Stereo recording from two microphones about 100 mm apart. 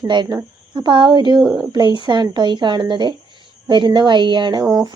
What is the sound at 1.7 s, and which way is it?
A woman's voice, 45° right (ahead or behind).